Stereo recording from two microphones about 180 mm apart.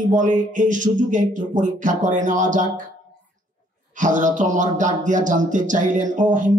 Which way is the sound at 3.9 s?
45° right (ahead or behind).